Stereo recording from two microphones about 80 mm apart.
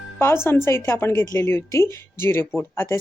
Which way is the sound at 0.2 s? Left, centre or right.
Left.